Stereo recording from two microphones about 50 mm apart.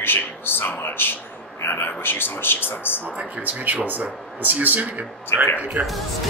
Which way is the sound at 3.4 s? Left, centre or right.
Right.